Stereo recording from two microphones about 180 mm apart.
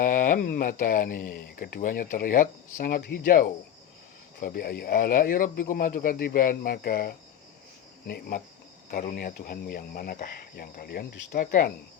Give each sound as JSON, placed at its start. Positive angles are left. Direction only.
{"t": 0.0, "sound": "speech", "side_deg": 50}
{"t": 8.0, "sound": "cricket", "side_deg": 55}
{"t": 8.9, "sound": "speech", "side_deg": 45}